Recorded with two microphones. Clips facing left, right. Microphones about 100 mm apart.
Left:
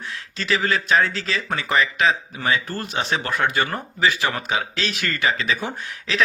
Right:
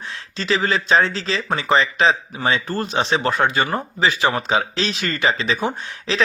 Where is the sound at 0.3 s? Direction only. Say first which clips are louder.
Right 2 dB; 25° right (ahead or behind).